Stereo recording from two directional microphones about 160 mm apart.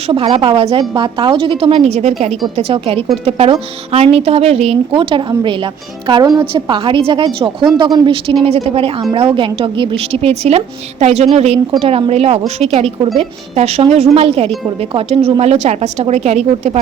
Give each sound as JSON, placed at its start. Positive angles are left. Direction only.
{"t": 0.1, "sound": "a woman's voice", "side_deg": -35}